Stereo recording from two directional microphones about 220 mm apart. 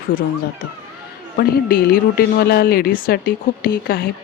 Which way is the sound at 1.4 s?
45° left (ahead or behind).